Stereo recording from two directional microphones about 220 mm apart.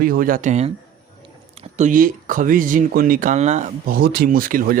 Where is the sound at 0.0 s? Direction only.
40° right (ahead or behind).